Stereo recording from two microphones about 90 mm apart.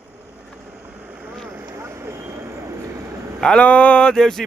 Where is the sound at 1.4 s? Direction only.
20° right (ahead or behind).